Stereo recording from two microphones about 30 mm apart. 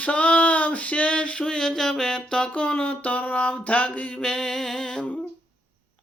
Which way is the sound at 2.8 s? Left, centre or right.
Left.